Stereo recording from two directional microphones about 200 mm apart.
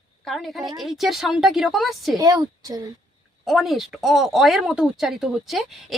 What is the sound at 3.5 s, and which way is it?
Speech, centre (ahead or behind).